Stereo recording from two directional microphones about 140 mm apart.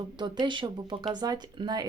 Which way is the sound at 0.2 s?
35° right (ahead or behind).